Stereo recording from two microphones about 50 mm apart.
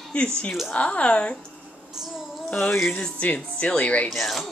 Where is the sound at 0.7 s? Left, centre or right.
Left.